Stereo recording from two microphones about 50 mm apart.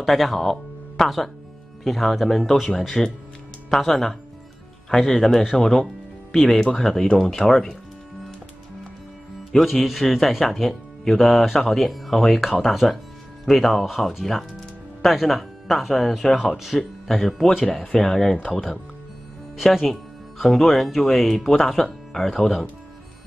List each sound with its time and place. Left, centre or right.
0.0 s speech: centre
5.6 s speech: centre
9.5 s speech: centre
19.5 s speech: centre